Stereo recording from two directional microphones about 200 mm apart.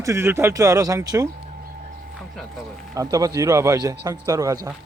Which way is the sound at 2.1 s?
Centre (ahead or behind).